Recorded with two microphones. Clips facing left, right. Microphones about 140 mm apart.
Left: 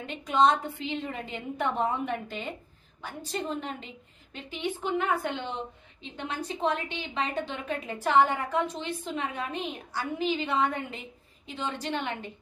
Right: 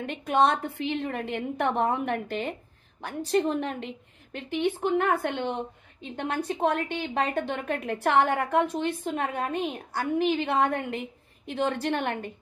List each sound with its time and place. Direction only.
0.0 s a woman's voice: 55° right (ahead or behind)